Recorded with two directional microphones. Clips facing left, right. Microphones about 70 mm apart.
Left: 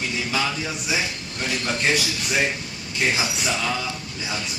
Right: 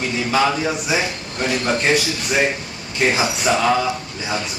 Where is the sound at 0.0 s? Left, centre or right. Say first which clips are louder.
Right 7 dB; right.